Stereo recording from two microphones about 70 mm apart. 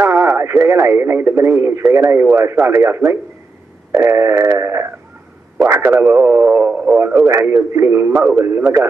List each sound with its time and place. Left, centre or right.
0.0 s radio: right
1.5 s speech: right